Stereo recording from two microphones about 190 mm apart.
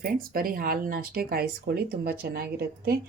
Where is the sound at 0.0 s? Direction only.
50° right (ahead or behind).